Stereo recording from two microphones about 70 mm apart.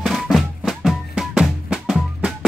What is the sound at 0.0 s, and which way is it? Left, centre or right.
Music, centre.